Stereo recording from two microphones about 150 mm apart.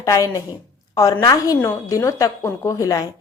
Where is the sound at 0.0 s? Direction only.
25° left (ahead or behind).